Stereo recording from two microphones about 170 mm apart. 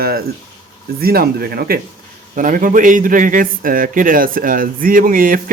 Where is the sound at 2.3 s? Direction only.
50° right (ahead or behind).